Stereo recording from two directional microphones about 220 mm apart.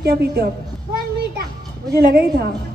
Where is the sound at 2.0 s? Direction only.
45° right (ahead or behind).